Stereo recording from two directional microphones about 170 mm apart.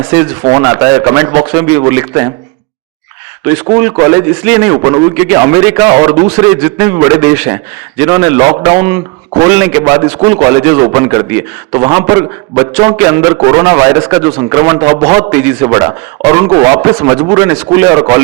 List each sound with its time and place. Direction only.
0.0 s a man's voice: 20° right (ahead or behind)
3.8 s a man's voice: 15° right (ahead or behind)
6.1 s a man's voice: 30° right (ahead or behind)
6.5 s a man's voice: 15° right (ahead or behind)
15.3 s a man's voice: 15° right (ahead or behind)